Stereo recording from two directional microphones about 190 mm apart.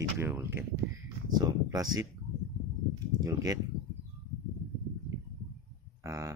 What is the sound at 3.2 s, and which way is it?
Speech, 20° right (ahead or behind).